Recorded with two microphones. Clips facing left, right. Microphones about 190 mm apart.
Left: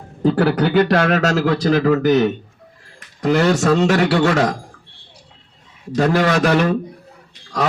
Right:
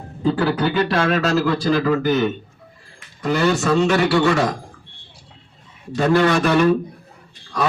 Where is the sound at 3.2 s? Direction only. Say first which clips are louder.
Left 3 dB; 75° left (ahead or behind).